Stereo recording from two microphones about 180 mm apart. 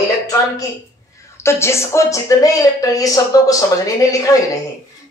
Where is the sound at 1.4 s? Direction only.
15° left (ahead or behind).